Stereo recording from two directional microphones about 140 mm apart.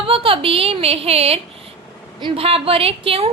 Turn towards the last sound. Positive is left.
turn(degrees=-45)  # may be behind; listen again after turning